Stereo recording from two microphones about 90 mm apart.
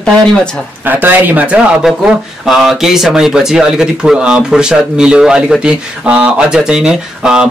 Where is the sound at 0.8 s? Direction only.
20° right (ahead or behind).